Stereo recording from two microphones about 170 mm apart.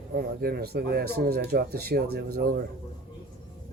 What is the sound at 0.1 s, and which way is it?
Speech, 60° right (ahead or behind).